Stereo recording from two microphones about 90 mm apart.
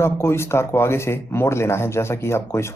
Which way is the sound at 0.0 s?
30° left (ahead or behind).